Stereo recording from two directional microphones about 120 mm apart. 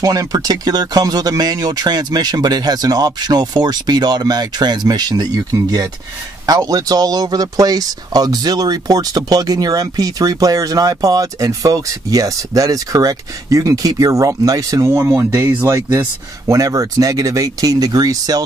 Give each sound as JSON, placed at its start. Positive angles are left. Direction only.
{"t": 0.0, "sound": "a man's voice", "side_deg": -30}